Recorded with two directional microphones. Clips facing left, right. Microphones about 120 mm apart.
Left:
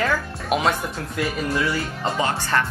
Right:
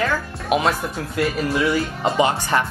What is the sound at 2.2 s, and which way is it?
Speech, 15° right (ahead or behind).